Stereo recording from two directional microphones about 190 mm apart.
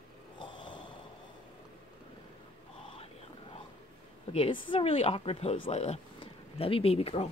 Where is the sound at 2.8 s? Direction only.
30° left (ahead or behind).